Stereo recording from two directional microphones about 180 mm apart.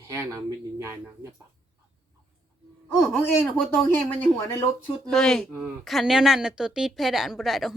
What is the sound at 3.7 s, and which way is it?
A woman's voice, 5° left (ahead or behind).